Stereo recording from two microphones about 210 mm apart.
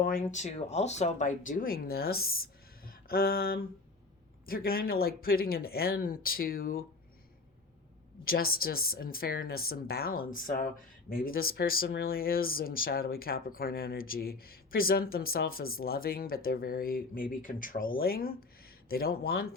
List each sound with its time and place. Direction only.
0.0 s speech: 40° left (ahead or behind)
8.2 s speech: 45° left (ahead or behind)